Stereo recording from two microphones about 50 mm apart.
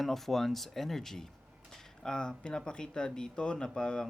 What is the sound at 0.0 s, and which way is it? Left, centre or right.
A man's voice, centre.